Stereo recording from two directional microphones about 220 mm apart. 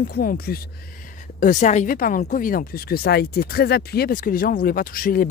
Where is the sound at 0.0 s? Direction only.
40° left (ahead or behind).